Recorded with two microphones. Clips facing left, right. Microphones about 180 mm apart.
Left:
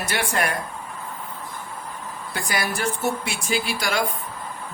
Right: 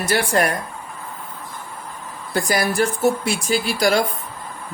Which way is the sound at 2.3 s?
35° right (ahead or behind).